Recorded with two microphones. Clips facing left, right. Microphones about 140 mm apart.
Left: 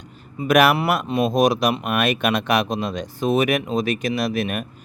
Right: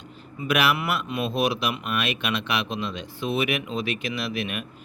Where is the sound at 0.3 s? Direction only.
45° left (ahead or behind).